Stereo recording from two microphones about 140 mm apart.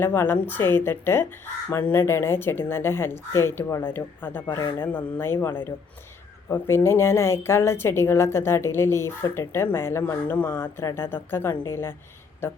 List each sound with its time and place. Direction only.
0.0 s a woman's voice: 15° left (ahead or behind)